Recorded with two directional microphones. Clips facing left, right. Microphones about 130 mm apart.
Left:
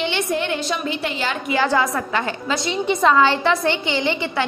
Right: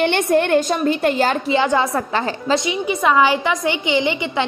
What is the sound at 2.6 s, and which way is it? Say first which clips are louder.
A woman's voice: left 1 dB; 10° right (ahead or behind).